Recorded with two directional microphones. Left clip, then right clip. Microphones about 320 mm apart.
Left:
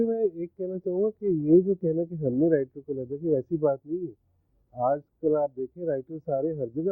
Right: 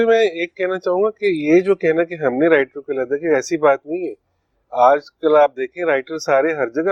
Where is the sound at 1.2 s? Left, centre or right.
Right.